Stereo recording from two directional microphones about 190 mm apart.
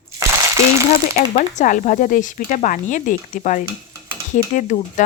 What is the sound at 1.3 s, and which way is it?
Speech, 40° left (ahead or behind).